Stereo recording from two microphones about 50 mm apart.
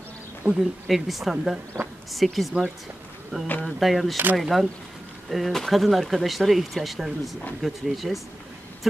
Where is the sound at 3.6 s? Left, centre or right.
Centre.